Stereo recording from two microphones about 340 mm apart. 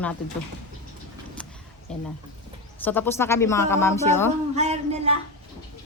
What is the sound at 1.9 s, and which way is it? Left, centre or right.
Speech, centre.